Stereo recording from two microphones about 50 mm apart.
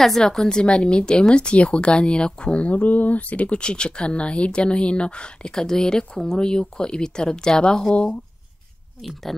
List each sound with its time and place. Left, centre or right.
0.0 s speech: centre